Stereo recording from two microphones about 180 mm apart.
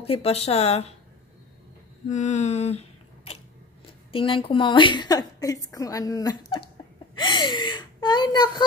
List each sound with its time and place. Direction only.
0.0 s speech: 35° left (ahead or behind)
2.0 s a sound: 40° left (ahead or behind)
3.8 s a woman's voice: 30° left (ahead or behind)